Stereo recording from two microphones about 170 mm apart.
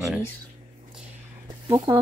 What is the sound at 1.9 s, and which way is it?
Speech, 25° right (ahead or behind).